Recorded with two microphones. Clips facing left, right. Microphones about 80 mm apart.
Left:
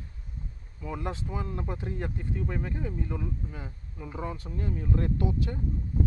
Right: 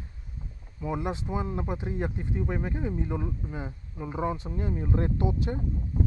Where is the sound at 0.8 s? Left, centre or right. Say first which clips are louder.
Right 4 dB; centre.